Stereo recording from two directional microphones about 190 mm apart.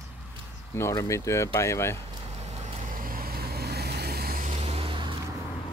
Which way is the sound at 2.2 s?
35° right (ahead or behind).